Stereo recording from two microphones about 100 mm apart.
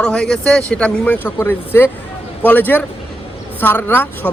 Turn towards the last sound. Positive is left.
turn(degrees=20)  # may be behind; listen again after turning